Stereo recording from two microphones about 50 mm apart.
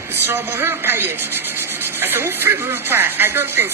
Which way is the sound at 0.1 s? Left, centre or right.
Right.